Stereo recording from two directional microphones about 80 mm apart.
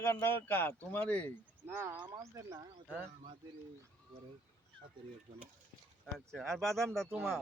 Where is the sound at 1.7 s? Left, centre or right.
Right.